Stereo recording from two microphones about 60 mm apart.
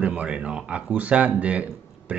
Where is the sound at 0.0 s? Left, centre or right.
Centre.